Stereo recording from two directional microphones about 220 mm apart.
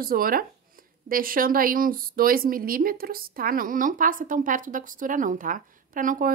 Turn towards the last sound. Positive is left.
turn(degrees=-35)  # may be behind; listen again after turning